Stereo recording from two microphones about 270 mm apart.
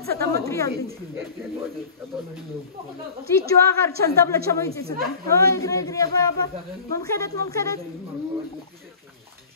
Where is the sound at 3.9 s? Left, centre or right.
Right.